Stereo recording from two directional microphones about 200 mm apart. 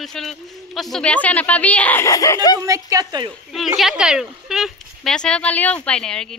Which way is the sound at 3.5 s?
Centre (ahead or behind).